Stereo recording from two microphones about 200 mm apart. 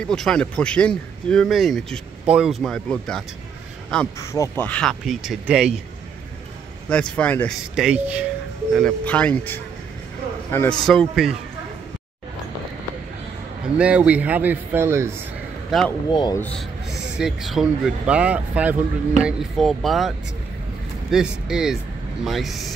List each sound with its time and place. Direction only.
0.0 s speech: 5° left (ahead or behind)
4.2 s speech: 15° left (ahead or behind); by 5.8 s 5° right (ahead or behind)
6.9 s speech: 5° left (ahead or behind)
7.7 s a man's voice: 5° right (ahead or behind)
8.7 s speech: 5° left (ahead or behind)
13.7 s a man's voice: 5° right (ahead or behind)
15.7 s speech: centre (ahead or behind)
16.1 s speech: 20° left (ahead or behind)
16.3 s speech: centre (ahead or behind)